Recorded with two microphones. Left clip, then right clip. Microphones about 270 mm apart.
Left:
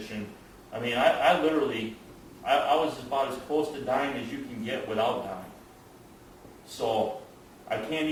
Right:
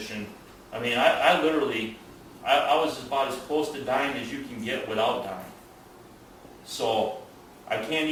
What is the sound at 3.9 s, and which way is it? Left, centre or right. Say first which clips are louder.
A man's voice: right 4 dB; centre.